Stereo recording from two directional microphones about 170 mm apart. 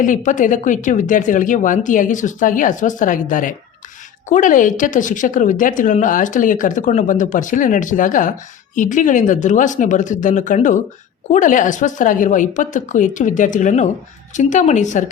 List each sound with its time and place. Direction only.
0.0 s speech: 50° left (ahead or behind)